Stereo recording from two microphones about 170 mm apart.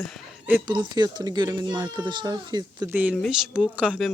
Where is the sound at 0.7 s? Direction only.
25° right (ahead or behind).